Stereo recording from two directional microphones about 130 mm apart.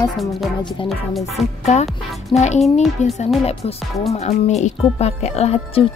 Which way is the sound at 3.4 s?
50° left (ahead or behind).